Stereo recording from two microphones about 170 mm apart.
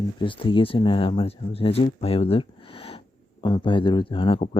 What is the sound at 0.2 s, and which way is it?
Speech, 30° left (ahead or behind).